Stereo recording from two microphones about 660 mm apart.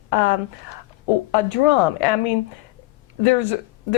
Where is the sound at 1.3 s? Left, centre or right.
Left.